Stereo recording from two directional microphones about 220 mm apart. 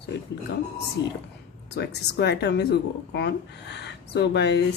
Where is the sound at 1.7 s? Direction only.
50° left (ahead or behind).